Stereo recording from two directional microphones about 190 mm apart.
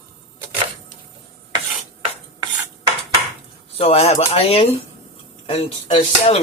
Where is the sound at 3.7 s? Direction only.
30° left (ahead or behind).